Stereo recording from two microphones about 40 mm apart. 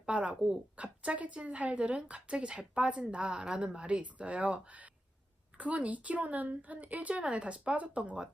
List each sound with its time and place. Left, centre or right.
0.0 s a woman's voice: right